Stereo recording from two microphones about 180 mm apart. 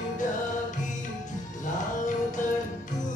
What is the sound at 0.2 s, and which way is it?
Music, 45° left (ahead or behind).